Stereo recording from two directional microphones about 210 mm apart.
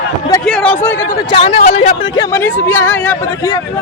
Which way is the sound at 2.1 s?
10° left (ahead or behind).